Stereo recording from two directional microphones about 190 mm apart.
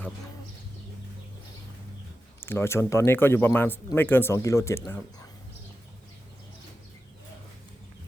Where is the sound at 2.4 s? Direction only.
10° left (ahead or behind).